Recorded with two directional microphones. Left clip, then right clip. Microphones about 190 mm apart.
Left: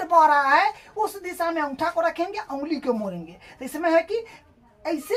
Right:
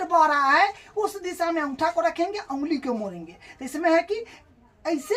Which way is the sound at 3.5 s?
15° left (ahead or behind).